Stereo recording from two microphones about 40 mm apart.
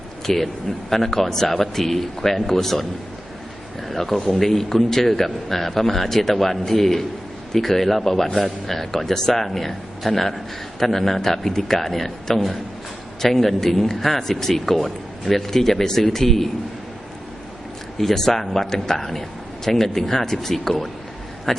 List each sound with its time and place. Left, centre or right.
0.3 s a man's voice: centre
3.8 s a man's voice: centre
17.9 s a man's voice: centre